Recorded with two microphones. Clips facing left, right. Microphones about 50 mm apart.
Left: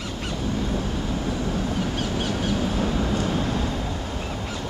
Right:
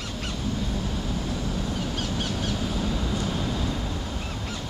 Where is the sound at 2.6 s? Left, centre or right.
Left.